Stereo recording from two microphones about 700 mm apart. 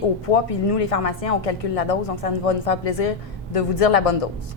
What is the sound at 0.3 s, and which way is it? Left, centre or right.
Speech, left.